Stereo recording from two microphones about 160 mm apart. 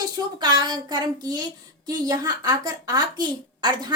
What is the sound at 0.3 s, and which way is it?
A woman's voice, 25° right (ahead or behind).